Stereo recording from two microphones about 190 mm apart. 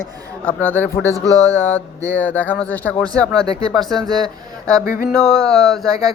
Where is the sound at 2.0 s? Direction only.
10° left (ahead or behind).